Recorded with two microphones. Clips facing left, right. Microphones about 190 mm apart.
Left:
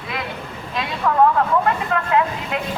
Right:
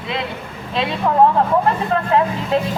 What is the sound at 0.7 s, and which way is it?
Speech, 25° right (ahead or behind).